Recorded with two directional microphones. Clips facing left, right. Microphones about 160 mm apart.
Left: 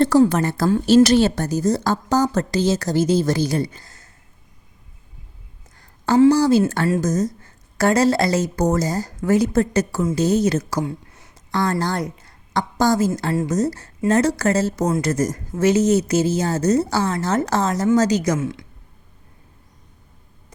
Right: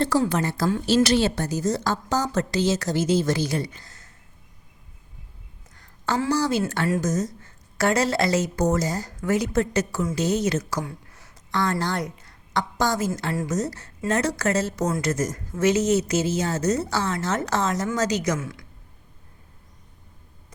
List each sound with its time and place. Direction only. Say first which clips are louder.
0.0 s a woman's voice: left 7 dB; 45° left (ahead or behind)
6.1 s a woman's voice: left 10 dB; 30° left (ahead or behind)
11.5 s a woman's voice: left 3 dB; 35° left (ahead or behind)